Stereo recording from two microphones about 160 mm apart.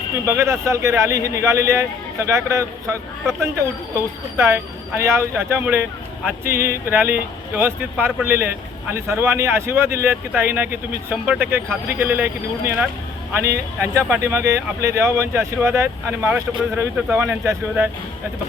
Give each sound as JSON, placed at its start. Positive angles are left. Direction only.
{"t": 0.3, "sound": "speech", "side_deg": -15}